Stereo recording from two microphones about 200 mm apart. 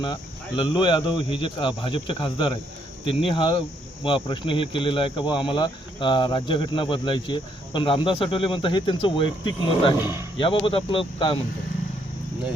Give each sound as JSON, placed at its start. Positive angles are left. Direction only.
{"t": 0.0, "sound": "speech", "side_deg": 25}
{"t": 10.0, "sound": "a man's voice", "side_deg": -10}
{"t": 10.3, "sound": "speech", "side_deg": 25}